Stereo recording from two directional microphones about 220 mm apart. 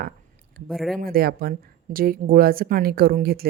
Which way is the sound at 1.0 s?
45° right (ahead or behind).